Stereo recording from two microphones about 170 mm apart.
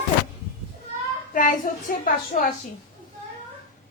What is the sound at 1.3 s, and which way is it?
A woman's voice, 50° left (ahead or behind).